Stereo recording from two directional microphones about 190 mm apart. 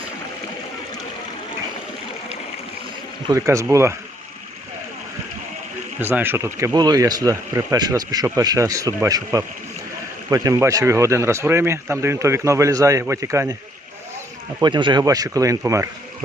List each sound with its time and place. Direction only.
3.2 s speech: 15° right (ahead or behind)
6.0 s speech: 10° right (ahead or behind)
14.6 s speech: 25° right (ahead or behind)